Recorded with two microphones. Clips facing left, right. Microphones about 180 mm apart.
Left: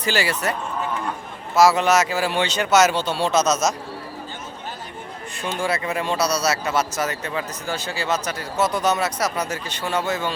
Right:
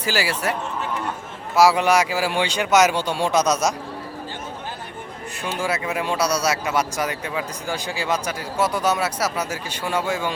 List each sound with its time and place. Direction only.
0.0 s speech: 5° right (ahead or behind)
1.5 s speech: 10° right (ahead or behind)
5.5 s speech: 10° right (ahead or behind)